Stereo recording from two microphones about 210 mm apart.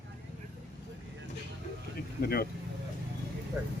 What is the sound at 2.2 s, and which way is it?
Speech, 45° left (ahead or behind).